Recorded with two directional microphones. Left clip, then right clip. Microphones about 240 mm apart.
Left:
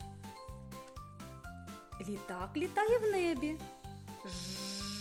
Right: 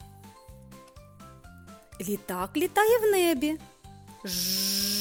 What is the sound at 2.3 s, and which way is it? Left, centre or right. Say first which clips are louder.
Speech: right 9 dB; right.